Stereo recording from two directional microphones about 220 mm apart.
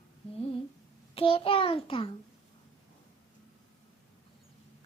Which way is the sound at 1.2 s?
25° left (ahead or behind).